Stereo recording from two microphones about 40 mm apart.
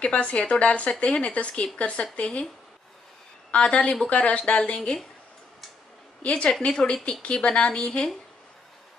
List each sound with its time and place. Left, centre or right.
0.0 s speech: left
3.5 s speech: left
6.2 s speech: left